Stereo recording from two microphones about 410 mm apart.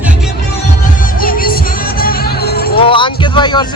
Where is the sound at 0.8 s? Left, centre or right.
Centre.